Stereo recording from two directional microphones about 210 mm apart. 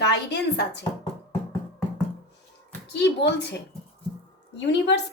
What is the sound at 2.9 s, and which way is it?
Speech, 55° left (ahead or behind).